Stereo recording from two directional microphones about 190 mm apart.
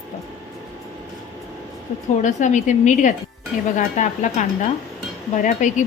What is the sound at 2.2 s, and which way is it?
A woman's voice, 40° left (ahead or behind).